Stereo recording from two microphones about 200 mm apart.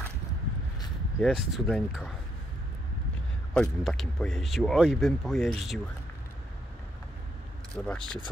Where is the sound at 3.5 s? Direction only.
5° left (ahead or behind).